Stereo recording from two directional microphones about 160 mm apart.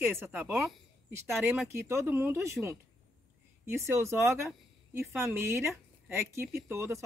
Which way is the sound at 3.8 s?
15° right (ahead or behind).